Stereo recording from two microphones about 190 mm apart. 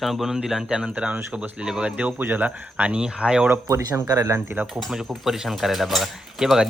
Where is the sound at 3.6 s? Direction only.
15° right (ahead or behind).